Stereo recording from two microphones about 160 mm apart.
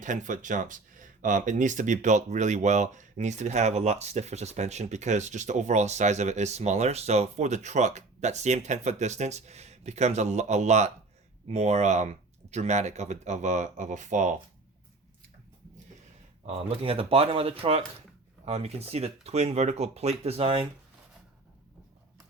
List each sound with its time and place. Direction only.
0.0 s speech: 50° right (ahead or behind)
16.5 s speech: 35° right (ahead or behind)